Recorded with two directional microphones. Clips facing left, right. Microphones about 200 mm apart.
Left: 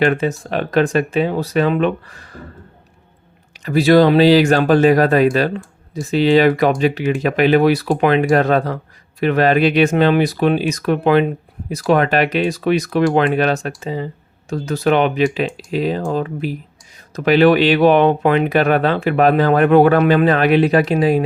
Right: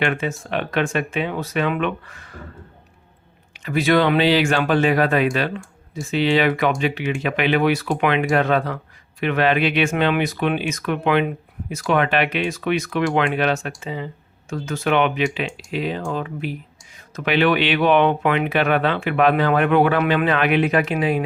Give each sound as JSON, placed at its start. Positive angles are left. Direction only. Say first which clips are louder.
{"t": 0.0, "sound": "speech", "louder": "left 6 dB", "side_deg": 35}
{"t": 3.6, "sound": "speech", "louder": "left 6 dB", "side_deg": 35}